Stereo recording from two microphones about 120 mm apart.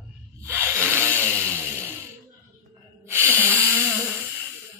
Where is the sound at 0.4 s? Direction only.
20° right (ahead or behind).